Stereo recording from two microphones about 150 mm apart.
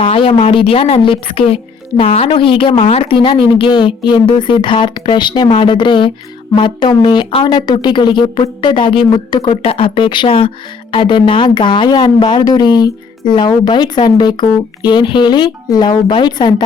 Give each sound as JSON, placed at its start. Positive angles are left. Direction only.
{"t": 0.0, "sound": "speech", "side_deg": 35}